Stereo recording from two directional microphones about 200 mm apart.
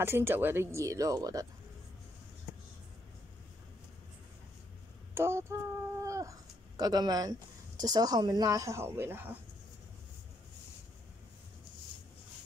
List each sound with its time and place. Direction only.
0.0 s speech: 10° right (ahead or behind)
5.1 s a sound: 10° right (ahead or behind)
6.8 s a woman's voice: 20° right (ahead or behind)